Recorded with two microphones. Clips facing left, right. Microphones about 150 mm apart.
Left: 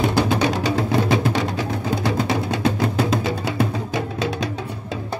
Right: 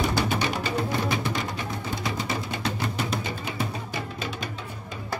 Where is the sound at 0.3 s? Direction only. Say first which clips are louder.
Left 7 dB; 80° left.